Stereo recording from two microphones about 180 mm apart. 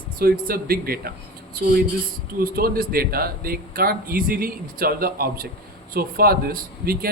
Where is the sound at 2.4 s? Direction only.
55° right (ahead or behind).